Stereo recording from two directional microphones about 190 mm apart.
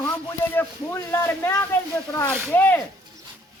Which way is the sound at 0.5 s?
10° left (ahead or behind).